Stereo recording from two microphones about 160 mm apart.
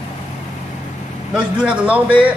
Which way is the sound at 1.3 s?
5° right (ahead or behind).